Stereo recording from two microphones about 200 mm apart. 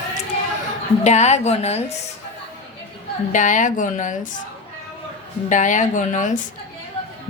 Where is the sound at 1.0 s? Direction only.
35° left (ahead or behind).